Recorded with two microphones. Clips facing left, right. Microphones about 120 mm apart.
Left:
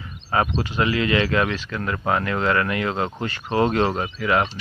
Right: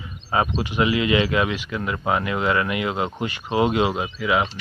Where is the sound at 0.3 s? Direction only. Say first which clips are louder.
Even; 15° right (ahead or behind).